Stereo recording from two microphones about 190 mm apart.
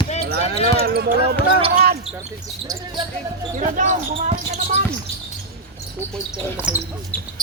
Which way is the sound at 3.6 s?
40° right (ahead or behind).